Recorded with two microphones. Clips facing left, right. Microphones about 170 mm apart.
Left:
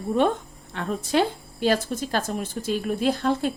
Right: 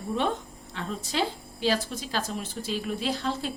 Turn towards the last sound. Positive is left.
turn(degrees=55)  # may be behind; listen again after turning